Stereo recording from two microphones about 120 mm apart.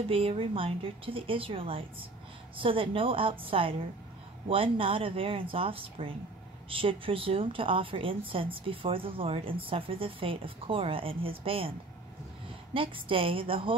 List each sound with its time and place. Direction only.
0.1 s speech: 50° right (ahead or behind)
12.7 s speech: 50° right (ahead or behind)